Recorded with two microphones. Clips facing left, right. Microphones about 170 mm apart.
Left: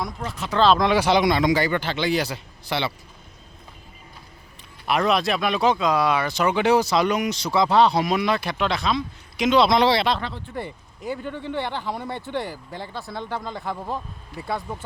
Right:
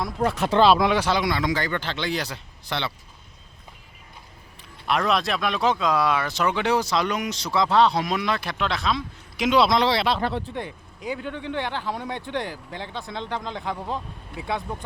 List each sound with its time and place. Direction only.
0.2 s speech: 55° right (ahead or behind)
0.6 s speech: 10° right (ahead or behind)
0.9 s a man's voice: 15° left (ahead or behind)
4.9 s speech: centre (ahead or behind)
11.2 s a man's voice: 10° left (ahead or behind)
12.2 s speech: 15° right (ahead or behind)
12.5 s a man's voice: 10° left (ahead or behind)